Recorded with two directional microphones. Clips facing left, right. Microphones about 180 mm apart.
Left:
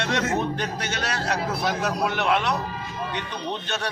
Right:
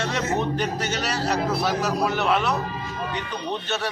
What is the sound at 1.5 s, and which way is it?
Speech, 10° right (ahead or behind).